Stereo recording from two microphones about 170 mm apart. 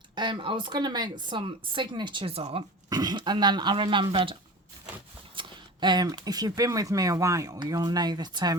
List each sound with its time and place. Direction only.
0.2 s speech: 30° right (ahead or behind)
2.9 s speech: 25° right (ahead or behind)